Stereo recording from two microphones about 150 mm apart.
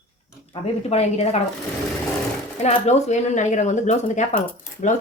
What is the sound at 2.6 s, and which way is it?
Speech, 50° left (ahead or behind).